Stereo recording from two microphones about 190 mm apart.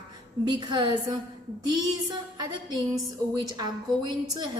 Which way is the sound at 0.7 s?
25° right (ahead or behind).